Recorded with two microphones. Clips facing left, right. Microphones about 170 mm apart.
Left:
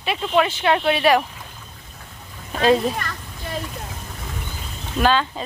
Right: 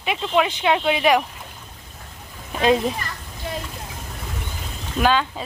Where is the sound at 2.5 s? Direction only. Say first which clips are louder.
Left 1 dB; 15° right (ahead or behind).